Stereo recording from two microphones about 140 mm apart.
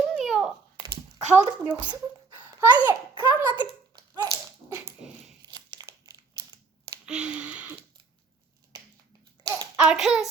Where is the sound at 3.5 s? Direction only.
30° right (ahead or behind).